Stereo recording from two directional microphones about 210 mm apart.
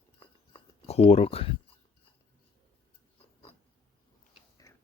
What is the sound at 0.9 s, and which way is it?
Speech, 30° left (ahead or behind).